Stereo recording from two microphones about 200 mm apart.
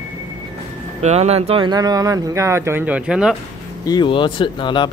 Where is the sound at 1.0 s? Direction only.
30° right (ahead or behind); by 3.3 s 5° right (ahead or behind).